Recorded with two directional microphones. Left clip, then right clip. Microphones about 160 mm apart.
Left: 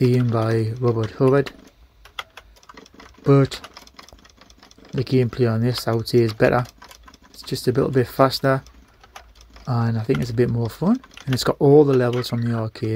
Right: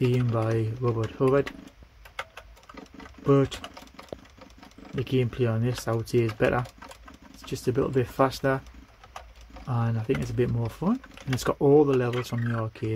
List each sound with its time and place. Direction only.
0.0 s speech: 25° left (ahead or behind)
0.4 s speech: 35° left (ahead or behind)
0.7 s speech: 25° left (ahead or behind)
2.1 s typing: 25° left (ahead or behind)
5.0 s speech: 30° left (ahead or behind)
9.7 s speech: 30° left (ahead or behind)